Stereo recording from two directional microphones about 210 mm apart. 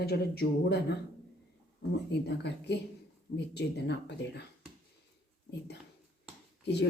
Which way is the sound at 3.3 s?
55° left (ahead or behind).